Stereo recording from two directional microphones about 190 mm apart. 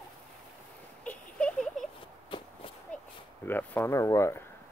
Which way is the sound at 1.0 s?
5° left (ahead or behind).